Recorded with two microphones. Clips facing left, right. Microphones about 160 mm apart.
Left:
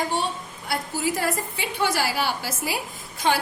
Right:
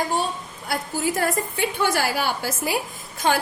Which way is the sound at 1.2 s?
50° right (ahead or behind).